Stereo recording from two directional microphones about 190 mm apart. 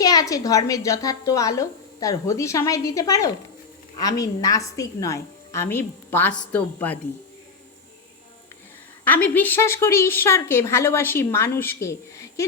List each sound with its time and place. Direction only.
0.0 s a woman's voice: 20° left (ahead or behind)
9.0 s a woman's voice: 10° left (ahead or behind)